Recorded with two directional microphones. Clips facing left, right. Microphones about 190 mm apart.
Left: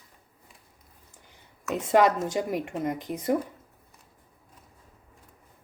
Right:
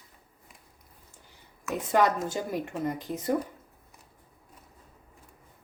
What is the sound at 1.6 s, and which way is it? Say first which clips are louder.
A woman's voice: left 3 dB; 20° left (ahead or behind).